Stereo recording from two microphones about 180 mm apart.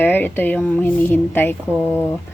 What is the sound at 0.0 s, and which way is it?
A woman's voice, 10° left (ahead or behind).